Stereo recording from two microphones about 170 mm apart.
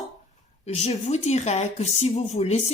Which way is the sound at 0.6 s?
40° left (ahead or behind).